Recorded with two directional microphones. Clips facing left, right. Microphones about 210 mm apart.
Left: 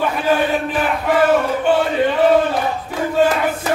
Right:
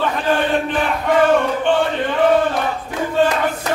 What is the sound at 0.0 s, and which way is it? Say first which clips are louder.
Chant: left 1 dB; 5° left (ahead or behind).